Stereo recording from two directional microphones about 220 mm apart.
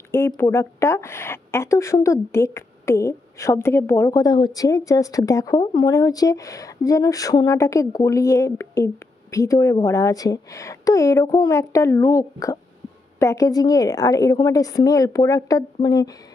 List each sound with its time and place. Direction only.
0.1 s a woman's voice: 10° left (ahead or behind)